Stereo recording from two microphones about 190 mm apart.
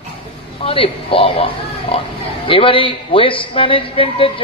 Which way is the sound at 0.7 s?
30° left (ahead or behind).